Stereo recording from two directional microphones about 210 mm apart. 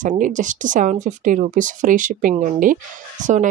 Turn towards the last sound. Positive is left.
turn(degrees=-35)  # may be behind; listen again after turning